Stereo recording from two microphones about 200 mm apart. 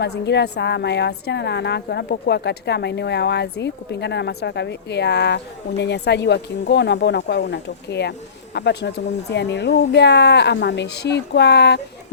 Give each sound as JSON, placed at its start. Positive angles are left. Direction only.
{"t": 0.0, "sound": "a woman's voice", "side_deg": 60}